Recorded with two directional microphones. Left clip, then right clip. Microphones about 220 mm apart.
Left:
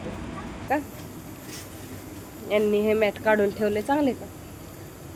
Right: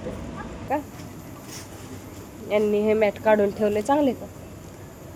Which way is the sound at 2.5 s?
Centre (ahead or behind).